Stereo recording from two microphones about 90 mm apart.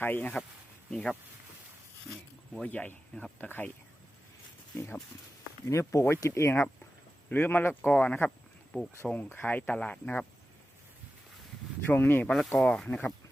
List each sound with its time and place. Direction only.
0.0 s speech: 20° left (ahead or behind); by 2.6 s centre (ahead or behind)
2.6 s speech: 15° left (ahead or behind)
5.6 s speech: 30° left (ahead or behind); by 10.2 s 15° left (ahead or behind)
11.9 s speech: 20° left (ahead or behind)
12.5 s speech: 5° left (ahead or behind)